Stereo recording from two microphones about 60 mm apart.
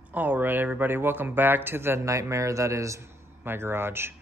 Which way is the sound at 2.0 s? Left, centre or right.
Right.